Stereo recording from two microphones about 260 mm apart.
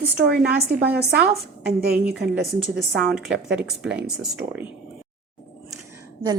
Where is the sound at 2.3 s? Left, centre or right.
Centre.